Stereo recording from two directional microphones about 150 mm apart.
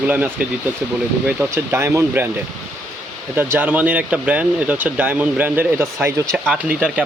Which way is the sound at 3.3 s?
15° right (ahead or behind).